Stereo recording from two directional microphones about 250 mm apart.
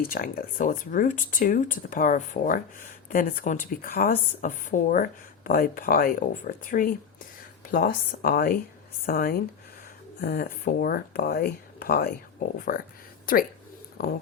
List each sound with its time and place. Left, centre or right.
0.0 s a woman's voice: left